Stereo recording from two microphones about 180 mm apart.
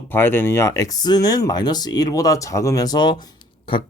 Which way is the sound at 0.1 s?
10° left (ahead or behind).